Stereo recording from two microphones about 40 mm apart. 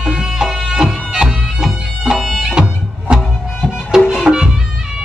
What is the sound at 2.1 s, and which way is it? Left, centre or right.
Bagpipes, centre.